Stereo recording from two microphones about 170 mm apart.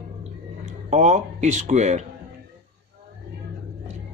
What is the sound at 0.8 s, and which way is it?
Speech, 45° right (ahead or behind).